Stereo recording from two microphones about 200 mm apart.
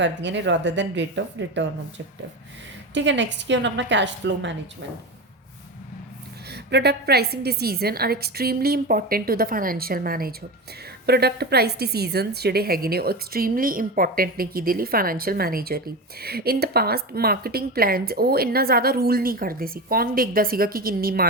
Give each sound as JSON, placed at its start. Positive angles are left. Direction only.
{"t": 0.0, "sound": "a woman's voice", "side_deg": -65}
{"t": 2.9, "sound": "a woman's voice", "side_deg": -65}
{"t": 6.5, "sound": "a woman's voice", "side_deg": -55}